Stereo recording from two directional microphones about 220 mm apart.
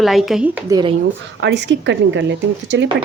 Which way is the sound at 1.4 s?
55° right (ahead or behind).